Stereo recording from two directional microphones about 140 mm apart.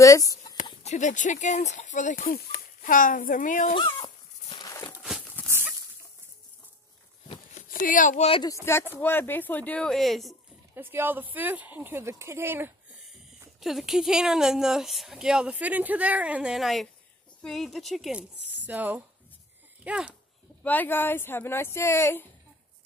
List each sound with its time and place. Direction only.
0.0 s speech: 25° left (ahead or behind)
0.8 s speech: 60° left (ahead or behind)
3.7 s dog: 40° left (ahead or behind)
5.4 s a sound: 10° left (ahead or behind)
7.5 s speech: 70° left (ahead or behind)
8.9 s speech: 15° left (ahead or behind)
10.7 s speech: 15° right (ahead or behind)
13.6 s speech: centre (ahead or behind)
18.6 s speech: 10° right (ahead or behind)
20.6 s speech: 10° left (ahead or behind)